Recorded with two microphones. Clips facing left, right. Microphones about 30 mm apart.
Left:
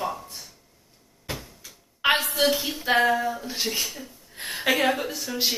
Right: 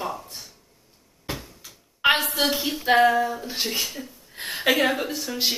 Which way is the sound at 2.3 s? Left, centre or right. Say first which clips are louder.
Left 1 dB; centre.